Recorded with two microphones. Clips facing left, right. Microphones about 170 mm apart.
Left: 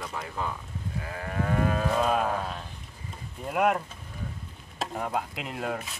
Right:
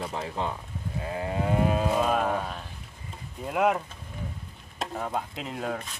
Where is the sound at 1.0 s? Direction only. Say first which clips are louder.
Right 3 dB; 20° right (ahead or behind).